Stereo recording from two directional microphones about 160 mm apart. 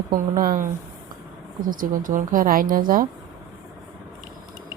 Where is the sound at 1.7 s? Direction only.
60° right (ahead or behind).